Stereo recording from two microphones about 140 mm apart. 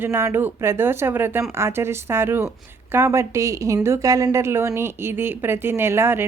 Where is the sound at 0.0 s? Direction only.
20° right (ahead or behind).